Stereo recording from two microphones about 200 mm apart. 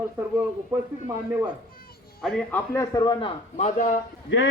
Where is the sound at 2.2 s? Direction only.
5° left (ahead or behind).